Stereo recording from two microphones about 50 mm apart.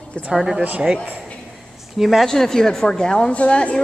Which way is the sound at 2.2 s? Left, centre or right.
Centre.